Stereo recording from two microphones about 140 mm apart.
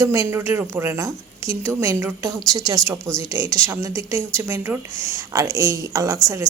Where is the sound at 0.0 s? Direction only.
25° right (ahead or behind).